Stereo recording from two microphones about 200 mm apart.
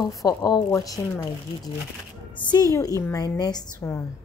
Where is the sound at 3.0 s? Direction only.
15° left (ahead or behind).